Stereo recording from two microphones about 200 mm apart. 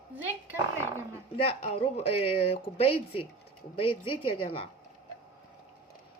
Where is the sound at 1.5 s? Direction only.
30° left (ahead or behind).